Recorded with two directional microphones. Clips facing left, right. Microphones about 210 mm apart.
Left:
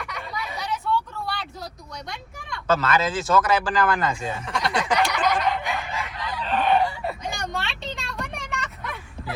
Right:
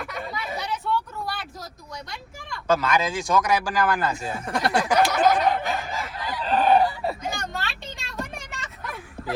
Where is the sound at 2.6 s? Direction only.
10° right (ahead or behind).